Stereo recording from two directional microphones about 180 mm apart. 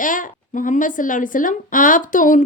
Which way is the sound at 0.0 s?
45° left (ahead or behind).